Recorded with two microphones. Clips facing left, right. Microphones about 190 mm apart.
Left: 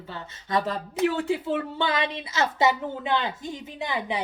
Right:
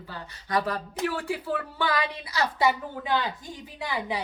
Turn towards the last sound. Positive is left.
turn(degrees=20)  # may be behind; listen again after turning